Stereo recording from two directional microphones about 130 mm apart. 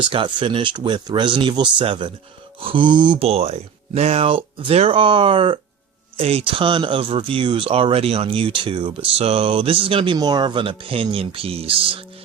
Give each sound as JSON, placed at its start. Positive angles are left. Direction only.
{"t": 0.0, "sound": "speech", "side_deg": -40}
{"t": 3.2, "sound": "speech", "side_deg": -50}